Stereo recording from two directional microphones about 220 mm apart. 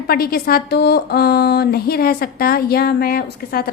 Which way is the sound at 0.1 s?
45° left (ahead or behind).